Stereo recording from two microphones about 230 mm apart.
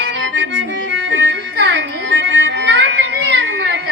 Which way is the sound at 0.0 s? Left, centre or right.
Right.